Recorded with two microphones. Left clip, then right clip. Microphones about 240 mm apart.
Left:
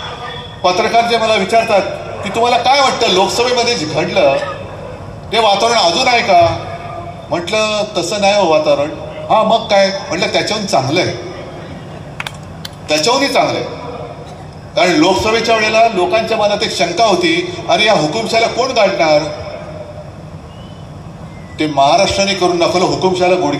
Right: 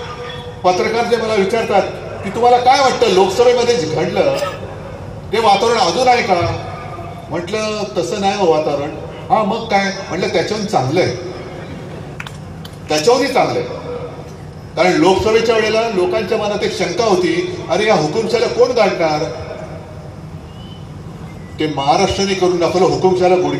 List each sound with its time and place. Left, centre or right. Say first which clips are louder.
0.6 s a man's voice: left 3 dB; left
5.3 s a man's voice: left 1 dB; left
7.4 s a man's voice: left 5 dB; left
12.8 s a man's voice: even; left
14.8 s a man's voice: left 1 dB; left
21.7 s a man's voice: left 5 dB; left